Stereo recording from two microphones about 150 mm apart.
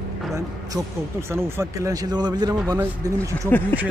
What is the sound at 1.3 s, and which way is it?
Speech, 20° right (ahead or behind).